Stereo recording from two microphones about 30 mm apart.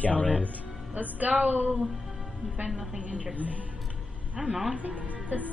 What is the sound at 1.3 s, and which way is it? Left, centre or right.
Speech, right.